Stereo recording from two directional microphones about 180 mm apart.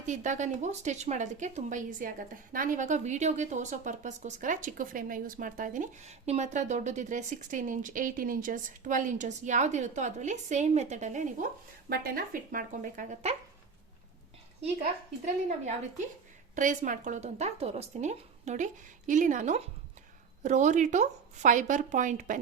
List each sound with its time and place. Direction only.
0.0 s speech: 40° right (ahead or behind)
15.2 s speech: 40° right (ahead or behind)